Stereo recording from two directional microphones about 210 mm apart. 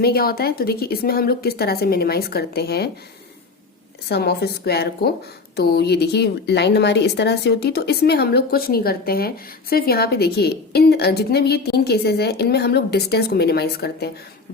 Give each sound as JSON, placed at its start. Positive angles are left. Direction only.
{"t": 0.0, "sound": "speech", "side_deg": 45}
{"t": 4.1, "sound": "speech", "side_deg": 50}